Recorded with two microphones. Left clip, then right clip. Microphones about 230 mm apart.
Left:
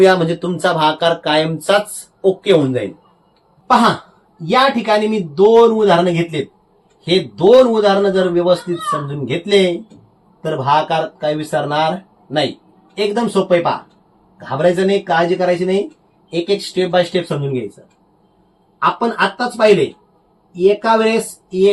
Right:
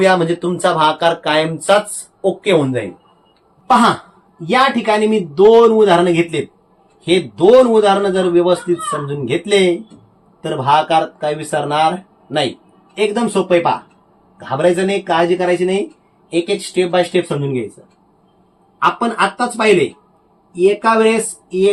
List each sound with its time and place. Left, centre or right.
0.0 s speech: centre
4.4 s a man's voice: centre
18.8 s a man's voice: right